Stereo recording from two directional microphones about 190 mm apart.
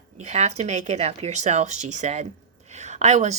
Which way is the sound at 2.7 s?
35° right (ahead or behind).